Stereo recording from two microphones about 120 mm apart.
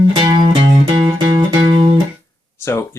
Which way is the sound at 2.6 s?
20° left (ahead or behind).